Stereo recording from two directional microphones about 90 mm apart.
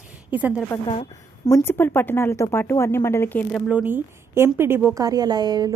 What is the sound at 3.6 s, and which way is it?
A woman's voice, 15° right (ahead or behind).